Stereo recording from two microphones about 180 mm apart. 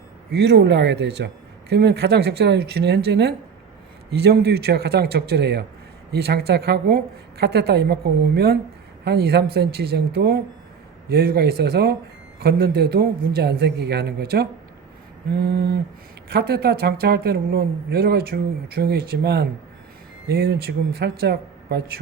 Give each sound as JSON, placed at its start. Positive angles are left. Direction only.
{"t": 0.3, "sound": "speech", "side_deg": -65}